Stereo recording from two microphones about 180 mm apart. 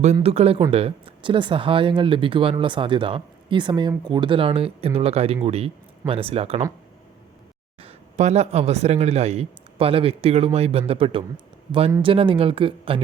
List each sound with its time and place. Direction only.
0.0 s speech: 35° right (ahead or behind)
7.8 s speech: 35° right (ahead or behind)